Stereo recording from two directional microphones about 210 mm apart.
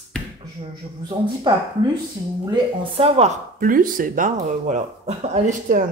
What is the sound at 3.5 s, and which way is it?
Speech, 40° right (ahead or behind).